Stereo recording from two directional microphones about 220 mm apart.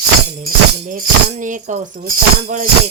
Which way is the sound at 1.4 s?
35° right (ahead or behind).